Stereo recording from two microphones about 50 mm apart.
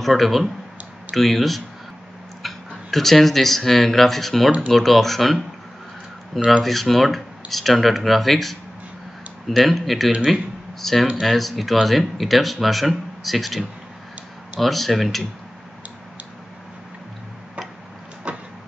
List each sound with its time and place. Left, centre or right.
0.0 s speech: centre
6.6 s speech: centre
9.7 s speech: centre
18.3 s vehicle: right